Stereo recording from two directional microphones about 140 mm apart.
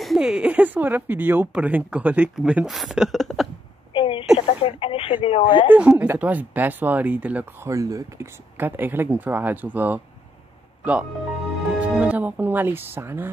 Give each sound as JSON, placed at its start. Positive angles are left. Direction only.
{"t": 0.0, "sound": "speech", "side_deg": 0}
{"t": 3.9, "sound": "a sound", "side_deg": 40}
{"t": 4.6, "sound": "speech", "side_deg": 40}
{"t": 5.7, "sound": "speech", "side_deg": -10}
{"t": 7.7, "sound": "speech", "side_deg": -25}